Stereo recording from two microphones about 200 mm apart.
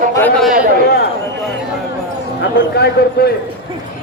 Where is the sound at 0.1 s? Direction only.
10° left (ahead or behind).